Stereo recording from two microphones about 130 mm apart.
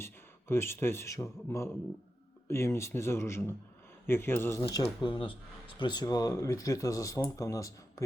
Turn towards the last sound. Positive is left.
turn(degrees=25)  # may be behind; listen again after turning